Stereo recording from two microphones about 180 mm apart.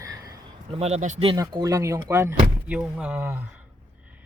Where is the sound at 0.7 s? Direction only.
35° right (ahead or behind).